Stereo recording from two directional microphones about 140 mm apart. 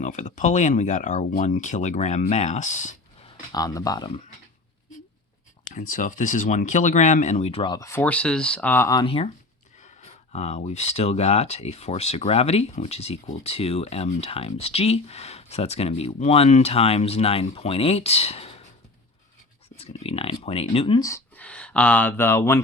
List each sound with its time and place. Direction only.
0.0 s speech: 60° left (ahead or behind)
3.2 s speech: 25° left (ahead or behind)
5.7 s speech: 70° left (ahead or behind); by 7.6 s 50° left (ahead or behind)
7.6 s speech: 30° left (ahead or behind)
7.9 s speech: 15° left (ahead or behind)
9.0 s speech: 45° left (ahead or behind)
10.3 s speech: 50° left (ahead or behind)
19.7 s speech: 45° left (ahead or behind)
21.3 s speech: 10° left (ahead or behind)